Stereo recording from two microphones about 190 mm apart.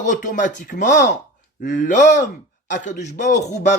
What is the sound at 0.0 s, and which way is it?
A man's voice, 40° left (ahead or behind).